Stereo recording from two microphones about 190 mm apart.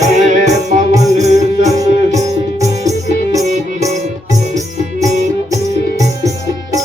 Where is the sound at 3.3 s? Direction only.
35° right (ahead or behind).